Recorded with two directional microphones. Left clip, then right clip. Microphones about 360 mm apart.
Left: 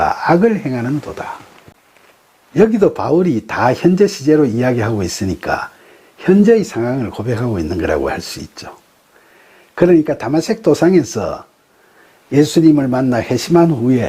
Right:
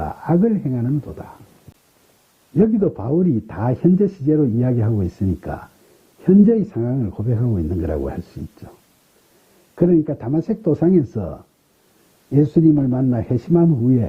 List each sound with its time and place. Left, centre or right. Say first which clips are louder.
0.0 s speech: left 8 dB; centre
2.6 s speech: left 7 dB; centre
9.7 s speech: left 6 dB; centre
13.7 s speech: left 4 dB; centre